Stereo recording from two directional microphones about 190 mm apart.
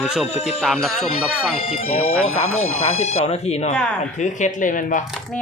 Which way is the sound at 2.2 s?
90° left.